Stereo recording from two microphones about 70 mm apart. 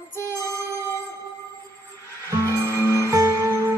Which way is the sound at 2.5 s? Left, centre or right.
Right.